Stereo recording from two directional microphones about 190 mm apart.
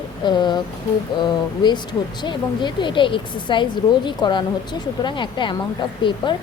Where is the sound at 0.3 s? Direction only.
25° left (ahead or behind).